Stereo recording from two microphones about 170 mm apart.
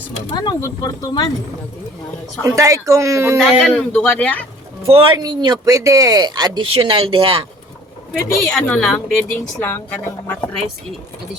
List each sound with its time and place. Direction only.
0.3 s speech: 25° left (ahead or behind)
2.4 s speech: 15° right (ahead or behind)
3.3 s speech: centre (ahead or behind)
4.9 s speech: 30° right (ahead or behind)
8.4 s a woman's voice: 5° left (ahead or behind)